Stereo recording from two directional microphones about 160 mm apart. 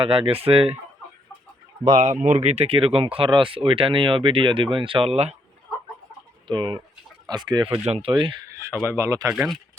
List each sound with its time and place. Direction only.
0.0 s speech: 35° right (ahead or behind)
2.0 s speech: 50° right (ahead or behind)
6.5 s speech: 30° right (ahead or behind)
8.5 s speech: 15° right (ahead or behind)
9.3 s speech: 5° right (ahead or behind)